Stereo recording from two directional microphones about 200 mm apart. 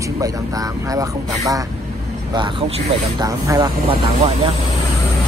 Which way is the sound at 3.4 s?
20° right (ahead or behind).